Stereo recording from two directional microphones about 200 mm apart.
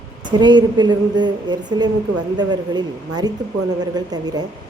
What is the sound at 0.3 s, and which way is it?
A woman's voice, 20° right (ahead or behind).